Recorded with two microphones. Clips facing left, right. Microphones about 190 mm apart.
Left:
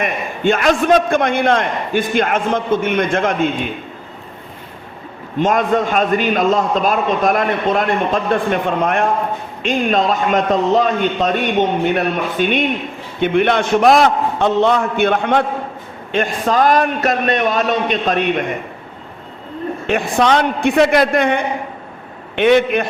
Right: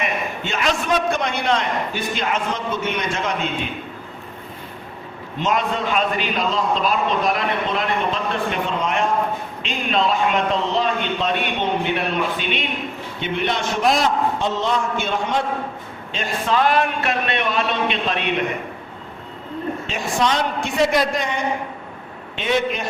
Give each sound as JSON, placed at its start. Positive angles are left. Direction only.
{"t": 0.0, "sound": "a man's voice", "side_deg": 50}
{"t": 5.4, "sound": "a man's voice", "side_deg": 50}
{"t": 9.6, "sound": "a man's voice", "side_deg": 45}
{"t": 16.1, "sound": "a man's voice", "side_deg": 50}
{"t": 19.9, "sound": "a man's voice", "side_deg": 60}